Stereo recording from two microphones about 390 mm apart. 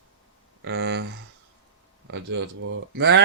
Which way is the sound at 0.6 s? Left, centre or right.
Right.